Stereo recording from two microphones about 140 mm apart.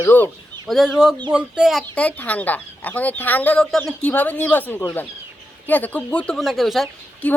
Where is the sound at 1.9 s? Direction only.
10° left (ahead or behind).